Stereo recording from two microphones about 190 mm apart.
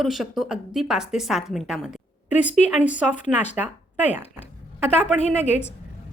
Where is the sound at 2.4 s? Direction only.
40° left (ahead or behind).